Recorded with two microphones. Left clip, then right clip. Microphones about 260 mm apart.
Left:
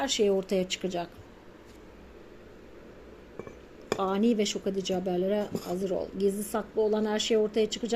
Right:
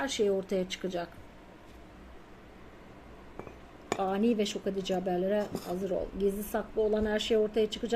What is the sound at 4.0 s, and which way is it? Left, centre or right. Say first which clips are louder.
Speech: left 2 dB; centre.